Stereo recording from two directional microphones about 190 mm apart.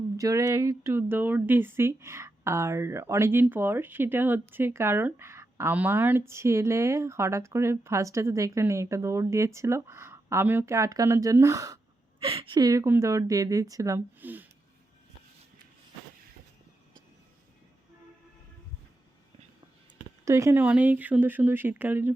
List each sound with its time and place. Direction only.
0.2 s speech: 20° right (ahead or behind)
12.2 s speech: 30° right (ahead or behind); by 14.4 s 10° right (ahead or behind)
20.2 s speech: 15° right (ahead or behind)